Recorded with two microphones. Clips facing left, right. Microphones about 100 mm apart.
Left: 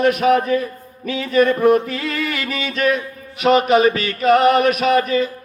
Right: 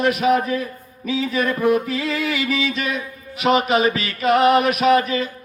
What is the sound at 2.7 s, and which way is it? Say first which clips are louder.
Music: left 6 dB; 45° left (ahead or behind).